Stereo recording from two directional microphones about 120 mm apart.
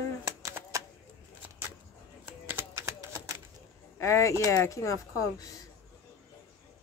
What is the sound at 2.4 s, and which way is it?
Typing, 20° right (ahead or behind).